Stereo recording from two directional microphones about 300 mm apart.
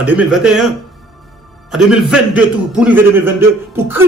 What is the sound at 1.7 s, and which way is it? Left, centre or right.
A man's voice, centre.